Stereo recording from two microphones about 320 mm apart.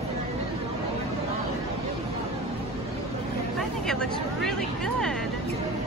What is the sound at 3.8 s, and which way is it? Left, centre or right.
Vehicle, centre.